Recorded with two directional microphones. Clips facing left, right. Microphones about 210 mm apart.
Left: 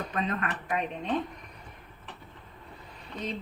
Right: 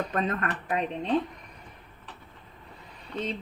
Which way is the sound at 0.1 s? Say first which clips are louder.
Right 2 dB; 45° right (ahead or behind).